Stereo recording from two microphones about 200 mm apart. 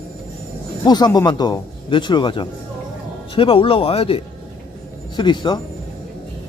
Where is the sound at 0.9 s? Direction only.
20° left (ahead or behind).